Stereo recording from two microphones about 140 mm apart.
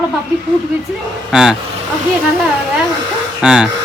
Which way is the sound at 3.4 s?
5° right (ahead or behind).